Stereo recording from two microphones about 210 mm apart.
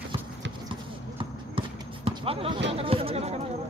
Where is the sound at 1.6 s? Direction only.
25° right (ahead or behind).